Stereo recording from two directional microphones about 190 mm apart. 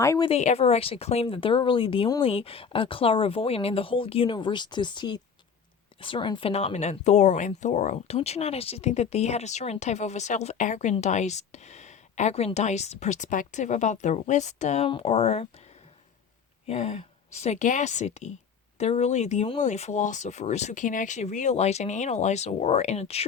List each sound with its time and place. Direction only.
0.0 s speech: 15° left (ahead or behind)
0.3 s speech: 35° left (ahead or behind)
16.6 s speech: 35° left (ahead or behind)